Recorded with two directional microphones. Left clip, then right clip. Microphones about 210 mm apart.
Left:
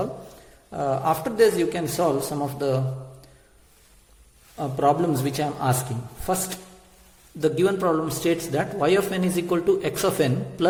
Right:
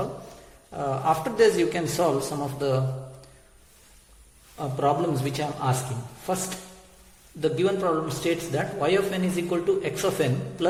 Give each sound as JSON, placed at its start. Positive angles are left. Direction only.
{"t": 0.7, "sound": "a man's voice", "side_deg": 25}
{"t": 4.5, "sound": "a man's voice", "side_deg": 35}